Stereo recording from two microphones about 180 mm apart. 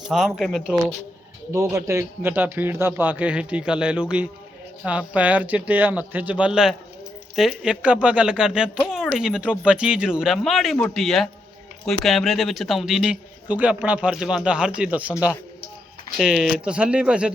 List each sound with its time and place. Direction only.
0.1 s a man's voice: centre (ahead or behind)
1.5 s a man's voice: 15° right (ahead or behind)
16.1 s a man's voice: centre (ahead or behind)